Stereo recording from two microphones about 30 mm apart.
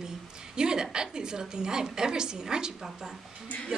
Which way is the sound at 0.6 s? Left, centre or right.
Right.